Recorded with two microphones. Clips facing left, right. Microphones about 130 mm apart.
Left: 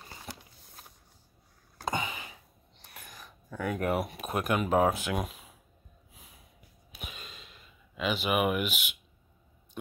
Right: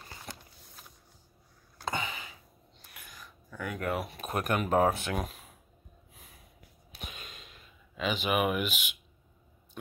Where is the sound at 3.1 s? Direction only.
30° left (ahead or behind).